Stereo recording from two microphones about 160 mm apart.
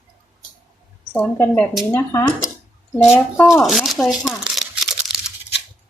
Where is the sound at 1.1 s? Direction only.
5° left (ahead or behind).